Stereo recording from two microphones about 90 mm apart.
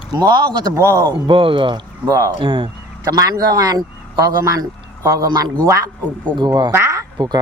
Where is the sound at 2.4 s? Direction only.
70° right (ahead or behind).